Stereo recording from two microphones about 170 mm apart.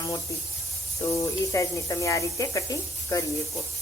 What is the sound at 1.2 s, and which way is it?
Speech, 20° left (ahead or behind).